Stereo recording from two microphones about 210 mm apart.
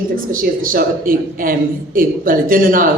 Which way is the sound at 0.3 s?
40° right (ahead or behind).